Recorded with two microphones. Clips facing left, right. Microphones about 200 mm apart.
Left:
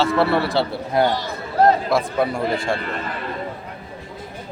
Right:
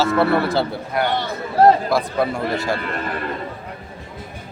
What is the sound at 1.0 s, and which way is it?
Speech, 25° left (ahead or behind).